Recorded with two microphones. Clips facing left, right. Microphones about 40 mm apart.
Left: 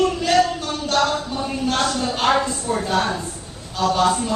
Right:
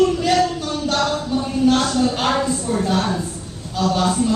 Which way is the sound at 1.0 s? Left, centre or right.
Centre.